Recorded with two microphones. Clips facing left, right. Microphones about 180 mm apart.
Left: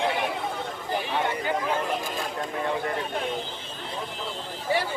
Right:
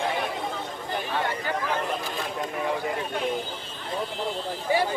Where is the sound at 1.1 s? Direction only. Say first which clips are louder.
Left 1 dB; 15° left (ahead or behind).